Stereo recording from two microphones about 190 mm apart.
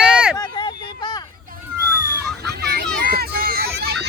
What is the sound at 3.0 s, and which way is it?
Run, 55° right (ahead or behind).